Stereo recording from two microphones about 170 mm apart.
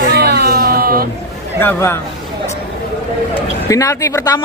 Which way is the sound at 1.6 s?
15° left (ahead or behind).